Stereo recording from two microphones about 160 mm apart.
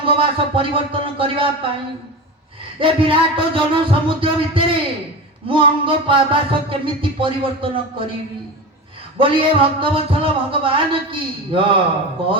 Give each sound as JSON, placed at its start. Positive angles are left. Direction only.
{"t": 0.0, "sound": "speech", "side_deg": -35}
{"t": 2.7, "sound": "speech", "side_deg": -35}
{"t": 9.1, "sound": "speech", "side_deg": -35}